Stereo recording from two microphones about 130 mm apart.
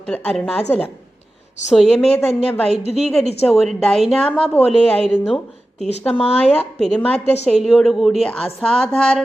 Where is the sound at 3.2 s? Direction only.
55° left (ahead or behind).